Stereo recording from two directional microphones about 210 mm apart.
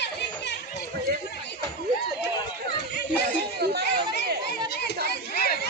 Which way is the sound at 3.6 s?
50° right (ahead or behind).